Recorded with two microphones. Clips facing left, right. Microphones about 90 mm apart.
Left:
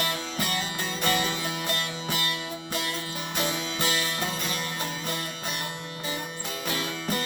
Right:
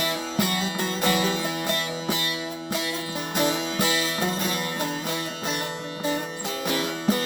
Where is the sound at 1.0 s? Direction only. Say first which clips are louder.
Right 3 dB; 15° right (ahead or behind).